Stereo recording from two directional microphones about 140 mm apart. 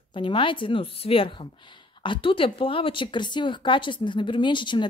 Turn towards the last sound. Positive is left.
turn(degrees=35)  # may be behind; listen again after turning